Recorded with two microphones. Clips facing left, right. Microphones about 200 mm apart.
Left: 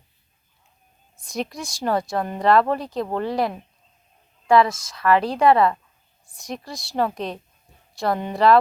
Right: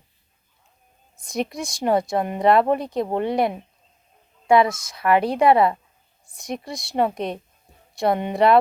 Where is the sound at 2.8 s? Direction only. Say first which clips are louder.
Right 2 dB; centre (ahead or behind).